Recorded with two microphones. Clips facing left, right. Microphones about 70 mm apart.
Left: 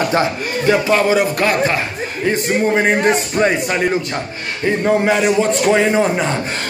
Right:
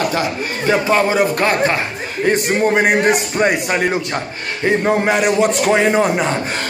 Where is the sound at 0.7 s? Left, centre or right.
Right.